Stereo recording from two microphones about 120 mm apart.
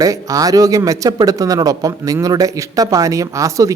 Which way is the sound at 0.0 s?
30° right (ahead or behind).